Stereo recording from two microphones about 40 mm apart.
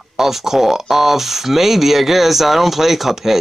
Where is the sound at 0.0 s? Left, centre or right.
Centre.